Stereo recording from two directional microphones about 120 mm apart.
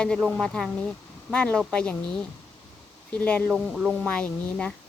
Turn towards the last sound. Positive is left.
turn(degrees=10)  # may be behind; listen again after turning